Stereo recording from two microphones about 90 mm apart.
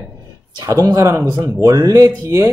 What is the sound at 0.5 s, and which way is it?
Speech, 40° right (ahead or behind).